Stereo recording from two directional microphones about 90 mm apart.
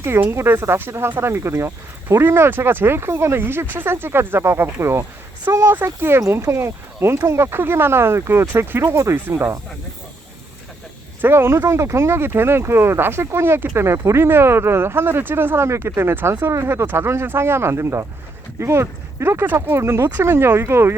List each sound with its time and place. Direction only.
0.0 s speech: 25° right (ahead or behind)
9.1 s speech: 20° right (ahead or behind)
11.2 s speech: 25° right (ahead or behind)